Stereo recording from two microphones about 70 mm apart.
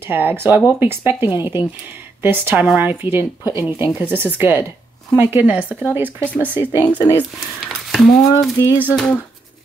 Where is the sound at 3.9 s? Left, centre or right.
Right.